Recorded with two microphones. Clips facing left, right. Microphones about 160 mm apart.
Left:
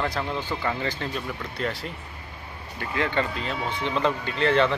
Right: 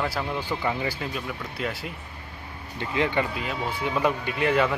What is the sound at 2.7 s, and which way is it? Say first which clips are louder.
Speech: right 1 dB; 20° right (ahead or behind).